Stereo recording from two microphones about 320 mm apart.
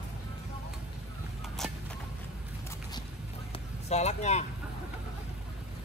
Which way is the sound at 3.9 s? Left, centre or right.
Left.